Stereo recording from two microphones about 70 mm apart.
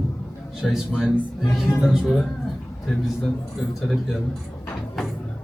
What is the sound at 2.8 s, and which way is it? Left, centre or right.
Speech, centre.